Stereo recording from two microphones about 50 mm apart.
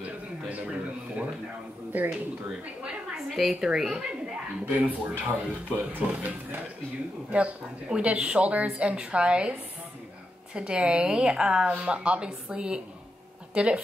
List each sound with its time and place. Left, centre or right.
1.9 s speech: right
3.3 s a woman's voice: centre
4.6 s speech: right
7.3 s a woman's voice: right